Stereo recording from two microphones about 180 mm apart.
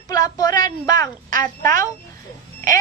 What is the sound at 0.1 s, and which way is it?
A woman's voice, 20° left (ahead or behind).